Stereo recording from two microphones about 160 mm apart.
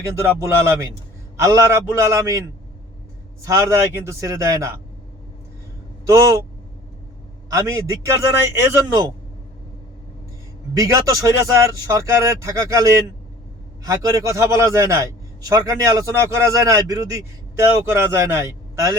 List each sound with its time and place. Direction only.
0.3 s a man's voice: 15° right (ahead or behind)
6.1 s a man's voice: 20° right (ahead or behind)
7.5 s a man's voice: 20° right (ahead or behind)
10.8 s a man's voice: 20° right (ahead or behind)